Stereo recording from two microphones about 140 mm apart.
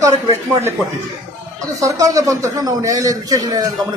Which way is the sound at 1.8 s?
25° right (ahead or behind).